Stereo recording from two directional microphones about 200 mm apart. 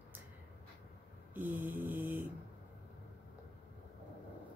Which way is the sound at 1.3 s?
10° right (ahead or behind).